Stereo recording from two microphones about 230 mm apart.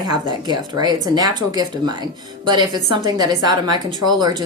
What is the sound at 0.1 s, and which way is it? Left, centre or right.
Speech, centre.